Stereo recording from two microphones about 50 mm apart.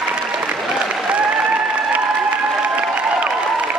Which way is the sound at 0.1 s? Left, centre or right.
Right.